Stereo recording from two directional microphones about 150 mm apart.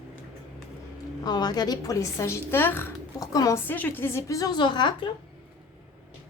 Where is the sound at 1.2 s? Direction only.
25° left (ahead or behind).